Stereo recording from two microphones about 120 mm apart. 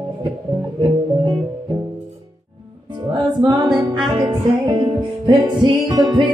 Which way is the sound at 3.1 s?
35° right (ahead or behind).